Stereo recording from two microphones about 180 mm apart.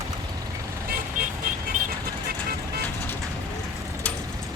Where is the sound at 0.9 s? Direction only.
55° right (ahead or behind).